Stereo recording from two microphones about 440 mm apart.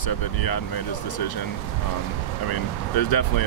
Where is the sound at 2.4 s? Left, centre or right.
Left.